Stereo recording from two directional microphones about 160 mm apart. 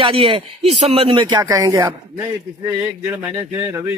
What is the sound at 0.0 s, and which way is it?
Speech, 35° right (ahead or behind).